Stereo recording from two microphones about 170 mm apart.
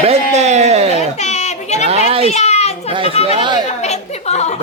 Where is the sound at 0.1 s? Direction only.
40° right (ahead or behind).